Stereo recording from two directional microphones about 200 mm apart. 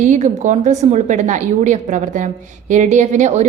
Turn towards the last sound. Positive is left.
turn(degrees=-35)  # may be behind; listen again after turning